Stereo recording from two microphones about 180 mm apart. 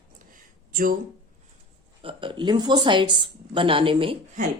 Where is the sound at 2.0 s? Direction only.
30° right (ahead or behind).